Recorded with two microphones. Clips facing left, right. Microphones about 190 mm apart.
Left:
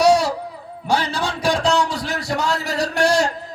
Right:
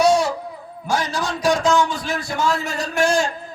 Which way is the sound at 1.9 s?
70° left (ahead or behind).